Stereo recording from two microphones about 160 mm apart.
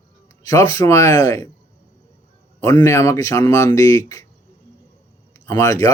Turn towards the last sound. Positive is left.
turn(degrees=20)  # may be behind; listen again after turning